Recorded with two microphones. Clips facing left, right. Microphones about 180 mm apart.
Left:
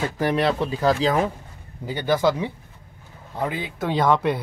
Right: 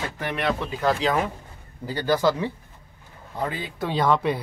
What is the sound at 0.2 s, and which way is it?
Speech, 35° left (ahead or behind).